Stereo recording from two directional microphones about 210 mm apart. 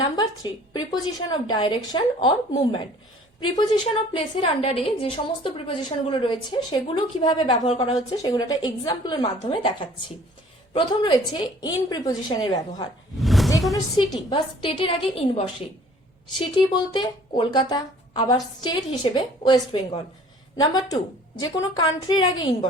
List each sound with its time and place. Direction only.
0.0 s a woman's voice: 20° left (ahead or behind)
3.6 s a woman's voice: 25° left (ahead or behind)
13.1 s a sound: centre (ahead or behind)
13.9 s a woman's voice: 25° left (ahead or behind)